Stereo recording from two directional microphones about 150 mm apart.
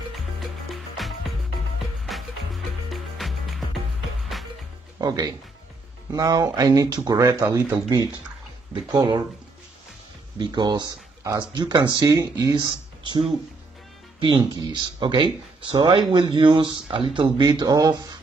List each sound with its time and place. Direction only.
0.1 s music: centre (ahead or behind)
4.9 s speech: 25° right (ahead or behind)
7.4 s speech: 15° right (ahead or behind)
8.9 s speech: 30° right (ahead or behind)
10.4 s speech: 30° right (ahead or behind)